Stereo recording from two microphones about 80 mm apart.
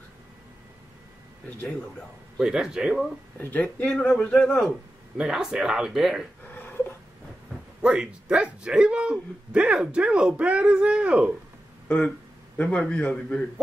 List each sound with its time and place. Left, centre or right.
2.3 s speech: centre
3.3 s speech: left
3.9 s a man's voice: centre
5.1 s speech: centre
7.8 s speech: centre
12.6 s a man's voice: centre